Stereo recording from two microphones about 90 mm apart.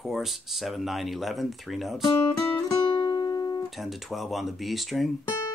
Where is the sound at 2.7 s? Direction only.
55° left (ahead or behind).